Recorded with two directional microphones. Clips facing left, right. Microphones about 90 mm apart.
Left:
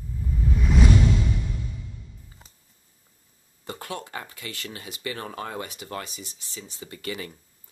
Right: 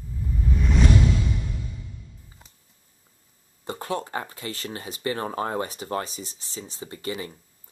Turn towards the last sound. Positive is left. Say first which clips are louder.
# right 2 dB
turn(degrees=-25)  # may be behind; listen again after turning